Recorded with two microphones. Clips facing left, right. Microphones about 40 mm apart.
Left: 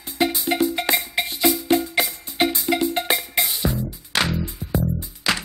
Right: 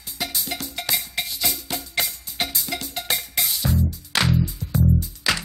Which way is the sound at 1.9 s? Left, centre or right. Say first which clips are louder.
Left 5 dB; centre.